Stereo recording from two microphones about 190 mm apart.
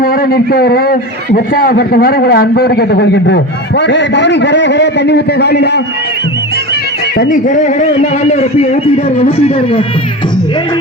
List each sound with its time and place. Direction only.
0.0 s a man's voice: 50° left (ahead or behind)
7.2 s a man's voice: 45° left (ahead or behind)